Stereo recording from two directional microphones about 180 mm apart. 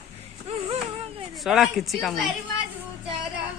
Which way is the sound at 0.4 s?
35° right (ahead or behind).